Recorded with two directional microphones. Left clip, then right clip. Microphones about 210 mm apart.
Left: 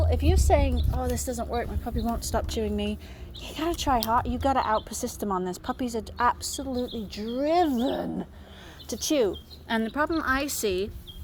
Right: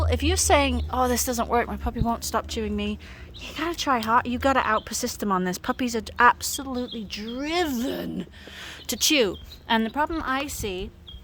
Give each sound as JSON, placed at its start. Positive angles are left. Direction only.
{"t": 0.0, "sound": "a woman's voice", "side_deg": -40}
{"t": 4.1, "sound": "speech", "side_deg": -30}
{"t": 5.3, "sound": "speech", "side_deg": -35}
{"t": 9.6, "sound": "a woman's voice", "side_deg": -15}
{"t": 10.3, "sound": "a woman's voice", "side_deg": 5}